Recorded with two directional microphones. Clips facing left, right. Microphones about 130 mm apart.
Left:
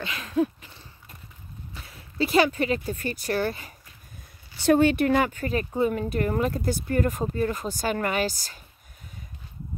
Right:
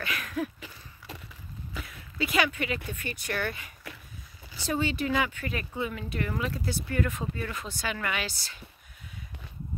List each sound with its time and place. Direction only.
0.0 s a sound: 25° left (ahead or behind)
1.9 s speech: 35° left (ahead or behind)
4.6 s speech: 60° left (ahead or behind); by 8.5 s 40° left (ahead or behind)